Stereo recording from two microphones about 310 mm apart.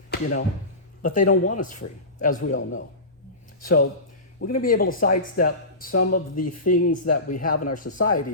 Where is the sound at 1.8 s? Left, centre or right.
Left.